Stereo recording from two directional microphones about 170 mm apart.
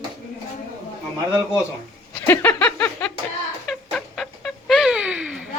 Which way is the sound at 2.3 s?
10° left (ahead or behind).